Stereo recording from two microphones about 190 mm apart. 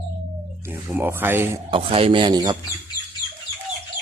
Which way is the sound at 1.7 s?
30° right (ahead or behind).